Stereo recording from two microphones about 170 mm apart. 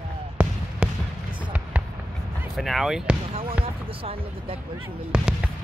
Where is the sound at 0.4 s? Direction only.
10° right (ahead or behind).